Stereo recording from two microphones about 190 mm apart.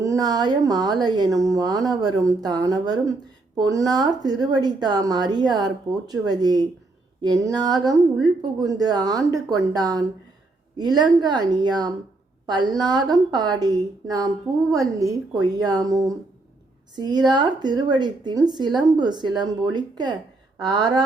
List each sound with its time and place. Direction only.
0.0 s a woman's voice: 20° right (ahead or behind)